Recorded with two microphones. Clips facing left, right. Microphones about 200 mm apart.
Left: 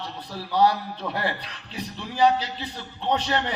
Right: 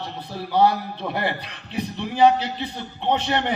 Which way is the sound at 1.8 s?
60° right (ahead or behind).